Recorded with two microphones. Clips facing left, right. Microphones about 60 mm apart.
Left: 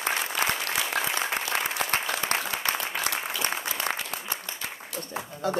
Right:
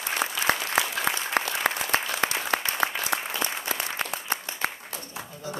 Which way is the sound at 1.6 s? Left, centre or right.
Right.